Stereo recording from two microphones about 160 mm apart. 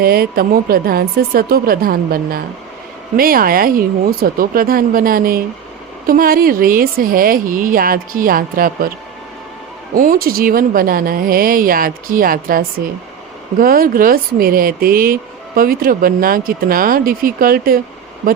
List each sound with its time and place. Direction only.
0.0 s a woman's voice: 70° right (ahead or behind)
9.9 s speech: 60° right (ahead or behind)